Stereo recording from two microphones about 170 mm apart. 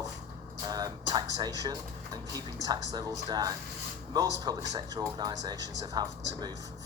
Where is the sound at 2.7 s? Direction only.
20° right (ahead or behind).